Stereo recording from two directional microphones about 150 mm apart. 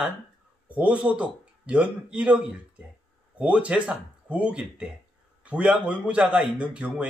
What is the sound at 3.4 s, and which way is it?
A man's voice, 10° right (ahead or behind).